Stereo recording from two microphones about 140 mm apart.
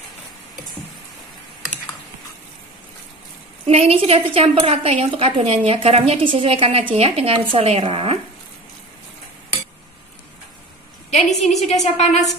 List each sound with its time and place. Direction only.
3.6 s a woman's voice: 45° right (ahead or behind)
11.2 s a woman's voice: centre (ahead or behind)
11.6 s a woman's voice: 50° left (ahead or behind)